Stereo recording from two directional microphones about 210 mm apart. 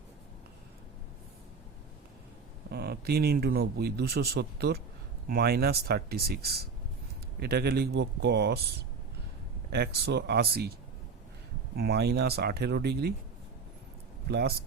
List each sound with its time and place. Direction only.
2.6 s speech: 50° right (ahead or behind)
9.7 s speech: 50° right (ahead or behind)
11.8 s speech: 50° right (ahead or behind)
14.3 s speech: 50° right (ahead or behind)